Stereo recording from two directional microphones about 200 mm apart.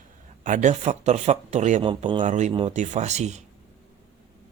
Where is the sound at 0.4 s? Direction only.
40° right (ahead or behind).